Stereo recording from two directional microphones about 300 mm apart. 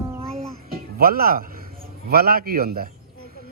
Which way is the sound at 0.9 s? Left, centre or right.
Right.